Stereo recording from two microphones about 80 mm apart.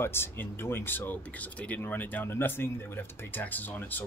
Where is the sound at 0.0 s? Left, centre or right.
Left.